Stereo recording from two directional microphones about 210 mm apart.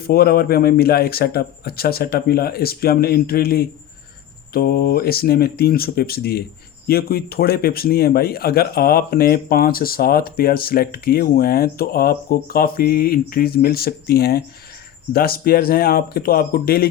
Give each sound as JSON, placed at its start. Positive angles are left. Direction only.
{"t": 0.0, "sound": "speech", "side_deg": 45}